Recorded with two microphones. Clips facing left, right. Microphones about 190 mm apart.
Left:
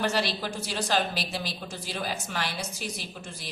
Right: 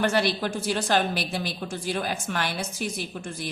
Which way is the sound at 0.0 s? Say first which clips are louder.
Right 4 dB; 55° right (ahead or behind).